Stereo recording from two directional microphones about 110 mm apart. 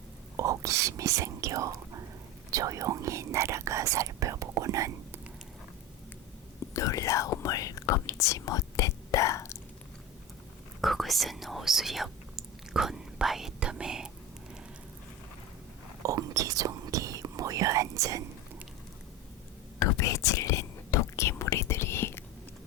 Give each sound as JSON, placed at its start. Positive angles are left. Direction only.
{"t": 0.3, "sound": "speech", "side_deg": -30}
{"t": 6.7, "sound": "speech", "side_deg": 30}
{"t": 10.8, "sound": "whispering", "side_deg": 0}
{"t": 16.0, "sound": "whispering", "side_deg": -30}
{"t": 19.8, "sound": "whispering", "side_deg": 30}